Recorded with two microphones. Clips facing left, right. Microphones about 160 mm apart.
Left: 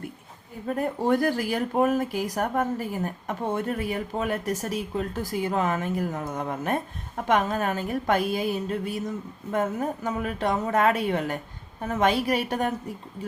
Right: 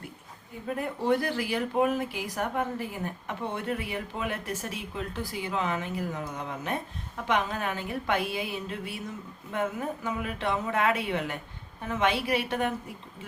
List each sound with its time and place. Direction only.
0.8 s a woman's voice: 45° left (ahead or behind)